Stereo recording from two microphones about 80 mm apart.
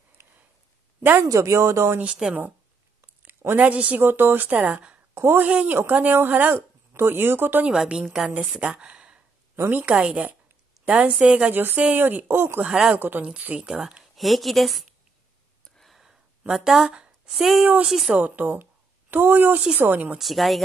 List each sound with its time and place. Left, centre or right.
1.2 s speech: right
2.0 s a woman's voice: centre
4.0 s speech: right
5.1 s a woman's voice: right
5.5 s a woman's voice: centre
7.6 s a woman's voice: centre; by 12.6 s right
12.6 s a woman's voice: centre
12.9 s a woman's voice: right
13.7 s a woman's voice: centre
15.8 s a sound: centre
17.8 s a woman's voice: centre
18.1 s speech: right
20.2 s a woman's voice: centre